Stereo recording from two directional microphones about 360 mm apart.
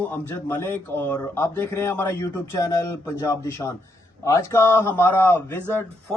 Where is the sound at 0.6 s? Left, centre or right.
Centre.